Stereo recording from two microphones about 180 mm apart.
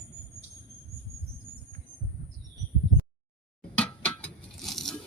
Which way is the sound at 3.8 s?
5° left (ahead or behind).